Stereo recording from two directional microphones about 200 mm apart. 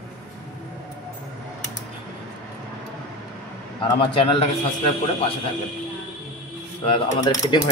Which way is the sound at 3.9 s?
25° left (ahead or behind).